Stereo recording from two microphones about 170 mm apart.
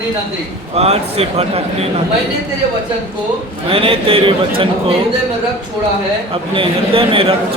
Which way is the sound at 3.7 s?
35° right (ahead or behind).